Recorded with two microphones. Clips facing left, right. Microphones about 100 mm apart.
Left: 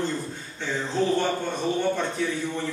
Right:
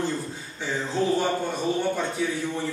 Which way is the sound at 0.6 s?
5° right (ahead or behind).